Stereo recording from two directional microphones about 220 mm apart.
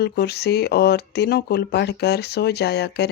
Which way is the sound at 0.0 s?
45° left (ahead or behind).